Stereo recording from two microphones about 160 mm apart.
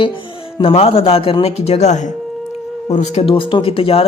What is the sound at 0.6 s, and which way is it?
Speech, 35° left (ahead or behind).